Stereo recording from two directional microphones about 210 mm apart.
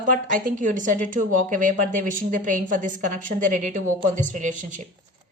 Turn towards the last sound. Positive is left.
turn(degrees=-35)  # may be behind; listen again after turning